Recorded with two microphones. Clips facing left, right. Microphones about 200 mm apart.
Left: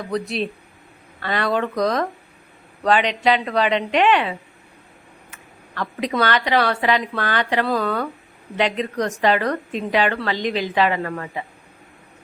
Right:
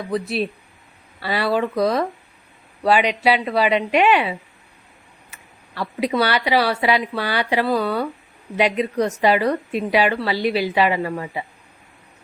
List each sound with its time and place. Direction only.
0.0 s a woman's voice: 5° right (ahead or behind)